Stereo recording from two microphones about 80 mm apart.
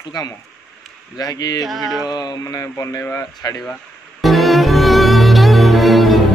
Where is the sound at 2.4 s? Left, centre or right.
Left.